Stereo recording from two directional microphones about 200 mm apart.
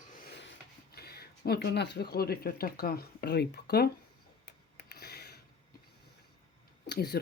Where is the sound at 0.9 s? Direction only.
55° left (ahead or behind).